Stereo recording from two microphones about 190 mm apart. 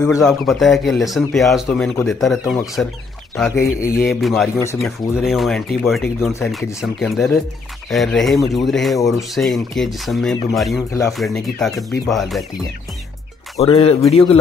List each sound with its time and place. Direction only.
0.2 s speech: centre (ahead or behind)
4.6 s speech: 15° left (ahead or behind)
4.8 s speech: centre (ahead or behind)
10.9 s speech: 15° left (ahead or behind)
11.1 s speech: centre (ahead or behind)
13.6 s speech: 30° left (ahead or behind)